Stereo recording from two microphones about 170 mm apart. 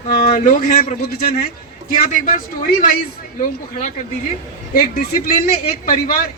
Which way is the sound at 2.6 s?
55° left (ahead or behind).